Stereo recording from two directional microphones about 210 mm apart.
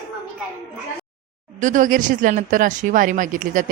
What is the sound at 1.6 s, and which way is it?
Speech, 35° right (ahead or behind).